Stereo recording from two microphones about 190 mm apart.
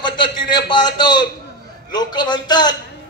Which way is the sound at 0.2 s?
25° left (ahead or behind).